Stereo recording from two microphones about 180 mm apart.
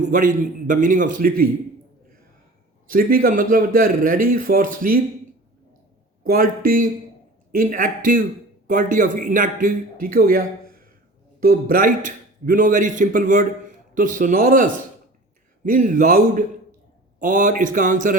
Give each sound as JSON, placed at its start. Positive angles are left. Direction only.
{"t": 0.1, "sound": "speech", "side_deg": -45}
{"t": 2.8, "sound": "speech", "side_deg": -50}
{"t": 6.2, "sound": "speech", "side_deg": -50}